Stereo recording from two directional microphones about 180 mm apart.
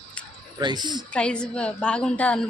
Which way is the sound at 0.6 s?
25° right (ahead or behind).